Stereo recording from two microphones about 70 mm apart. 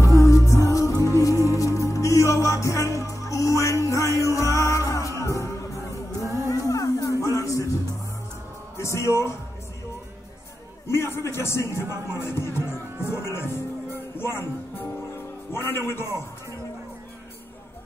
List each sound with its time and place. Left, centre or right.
0.0 s music: left
10.9 s music: left
15.5 s a man's voice: left